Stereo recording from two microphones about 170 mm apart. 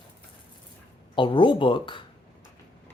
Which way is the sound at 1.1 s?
30° left (ahead or behind).